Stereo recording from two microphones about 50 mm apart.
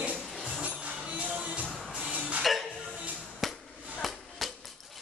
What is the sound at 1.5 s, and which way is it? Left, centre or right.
Music, right.